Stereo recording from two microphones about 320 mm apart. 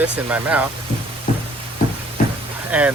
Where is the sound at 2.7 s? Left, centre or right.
Centre.